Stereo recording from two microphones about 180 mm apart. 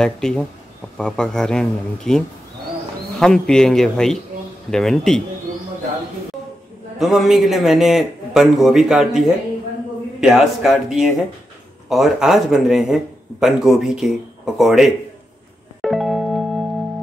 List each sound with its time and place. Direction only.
0.0 s a man's voice: 5° left (ahead or behind)
7.0 s a man's voice: centre (ahead or behind)
15.8 s music: centre (ahead or behind)